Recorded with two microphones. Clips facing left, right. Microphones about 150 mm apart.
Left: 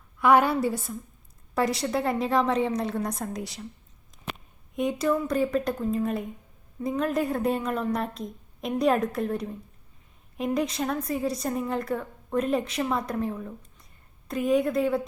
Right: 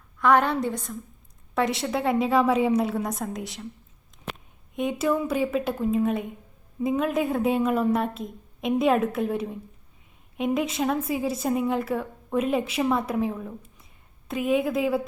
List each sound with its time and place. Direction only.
0.2 s a woman's voice: 10° left (ahead or behind)
4.7 s a woman's voice: centre (ahead or behind)